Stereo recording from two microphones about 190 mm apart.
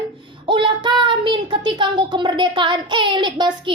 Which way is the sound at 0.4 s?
25° right (ahead or behind).